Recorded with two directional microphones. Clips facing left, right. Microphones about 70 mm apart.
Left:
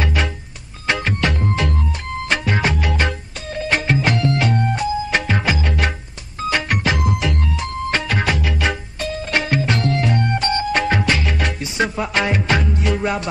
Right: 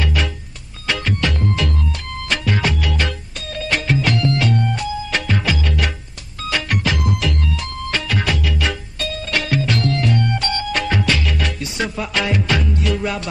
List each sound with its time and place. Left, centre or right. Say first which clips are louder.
0.0 s music: left 1 dB; left